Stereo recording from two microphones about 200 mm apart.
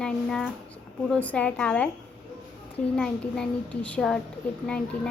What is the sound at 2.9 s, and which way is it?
A child's voice, 5° left (ahead or behind).